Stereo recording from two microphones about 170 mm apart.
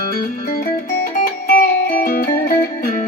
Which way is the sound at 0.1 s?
55° left (ahead or behind).